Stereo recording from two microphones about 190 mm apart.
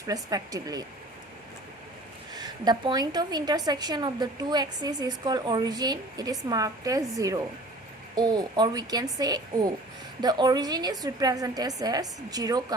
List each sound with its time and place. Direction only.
0.1 s a woman's voice: 20° right (ahead or behind)
2.3 s a woman's voice: 20° right (ahead or behind)